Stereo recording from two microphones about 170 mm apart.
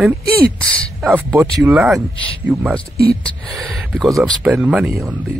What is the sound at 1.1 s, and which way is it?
Speech, 10° right (ahead or behind).